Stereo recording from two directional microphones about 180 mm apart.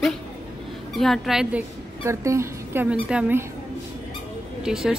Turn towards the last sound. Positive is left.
turn(degrees=-5)  # may be behind; listen again after turning